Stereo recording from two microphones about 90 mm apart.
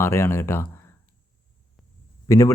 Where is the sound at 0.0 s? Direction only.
30° left (ahead or behind).